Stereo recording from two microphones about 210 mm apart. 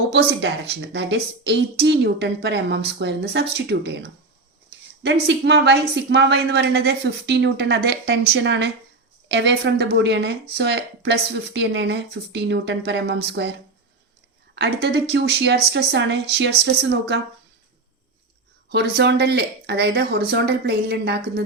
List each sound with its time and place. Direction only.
0.1 s a woman's voice: 55° right (ahead or behind)
5.3 s a woman's voice: 55° right (ahead or behind)
14.5 s a woman's voice: 55° right (ahead or behind)
18.7 s a woman's voice: 50° right (ahead or behind)